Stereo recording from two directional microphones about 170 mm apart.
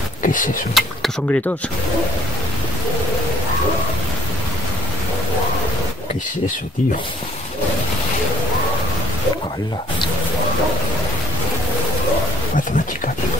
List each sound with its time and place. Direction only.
0.2 s speech: 50° left (ahead or behind)
0.7 s speech: centre (ahead or behind)